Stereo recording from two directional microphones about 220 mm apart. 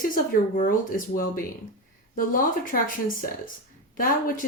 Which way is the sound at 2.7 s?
40° left (ahead or behind).